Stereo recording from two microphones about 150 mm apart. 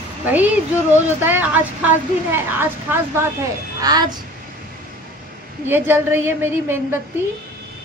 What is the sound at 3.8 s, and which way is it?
Speech, 25° right (ahead or behind).